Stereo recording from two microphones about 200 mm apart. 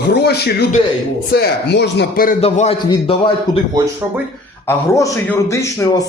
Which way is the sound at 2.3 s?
30° left (ahead or behind).